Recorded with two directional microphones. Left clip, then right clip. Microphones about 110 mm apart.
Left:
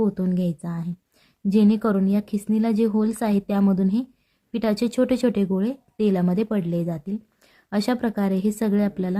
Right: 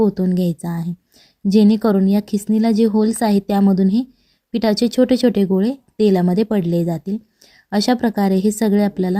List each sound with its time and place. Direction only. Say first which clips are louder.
0.0 s speech: right 7 dB; 25° right (ahead or behind)